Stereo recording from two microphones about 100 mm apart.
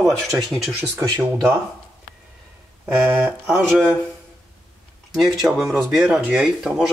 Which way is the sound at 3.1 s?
20° right (ahead or behind).